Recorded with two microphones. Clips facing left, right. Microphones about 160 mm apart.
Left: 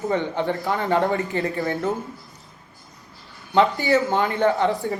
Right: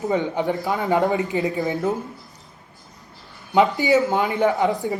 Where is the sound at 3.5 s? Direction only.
15° right (ahead or behind).